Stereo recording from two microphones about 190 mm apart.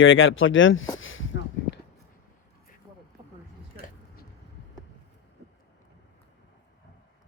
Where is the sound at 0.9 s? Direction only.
90° left.